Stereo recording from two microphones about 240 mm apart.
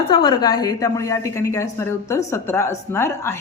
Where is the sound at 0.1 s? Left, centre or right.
Centre.